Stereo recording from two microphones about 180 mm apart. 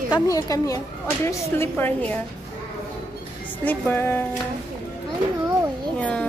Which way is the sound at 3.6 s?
10° left (ahead or behind).